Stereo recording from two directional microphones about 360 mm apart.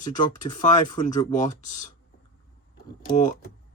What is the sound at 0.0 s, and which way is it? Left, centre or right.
Speech, left.